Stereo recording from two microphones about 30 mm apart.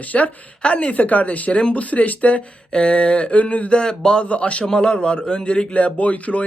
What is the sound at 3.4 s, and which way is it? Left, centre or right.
Speech, left.